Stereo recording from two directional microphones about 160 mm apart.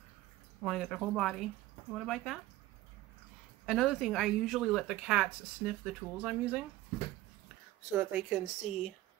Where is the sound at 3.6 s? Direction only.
Centre (ahead or behind).